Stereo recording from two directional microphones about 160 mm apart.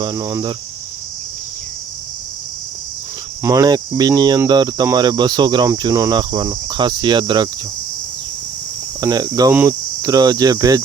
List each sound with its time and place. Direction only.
0.0 s cricket: 25° right (ahead or behind)
3.4 s cricket: 20° right (ahead or behind)
9.0 s cricket: 25° right (ahead or behind)